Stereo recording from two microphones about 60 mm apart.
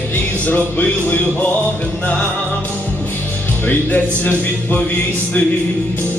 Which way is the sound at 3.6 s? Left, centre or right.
Left.